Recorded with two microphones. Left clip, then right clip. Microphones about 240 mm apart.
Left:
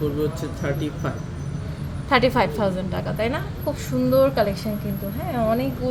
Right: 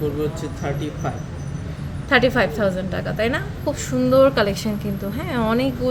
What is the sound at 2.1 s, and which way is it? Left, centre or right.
A woman's voice, centre.